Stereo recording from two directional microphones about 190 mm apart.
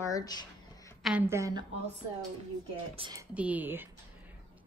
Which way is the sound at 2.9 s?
30° right (ahead or behind).